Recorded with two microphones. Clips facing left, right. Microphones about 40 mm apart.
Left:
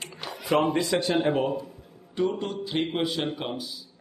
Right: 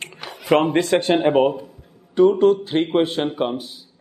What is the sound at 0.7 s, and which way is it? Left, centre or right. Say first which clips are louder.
Speech: right 7 dB; right.